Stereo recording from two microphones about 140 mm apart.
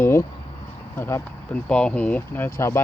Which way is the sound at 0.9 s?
15° left (ahead or behind).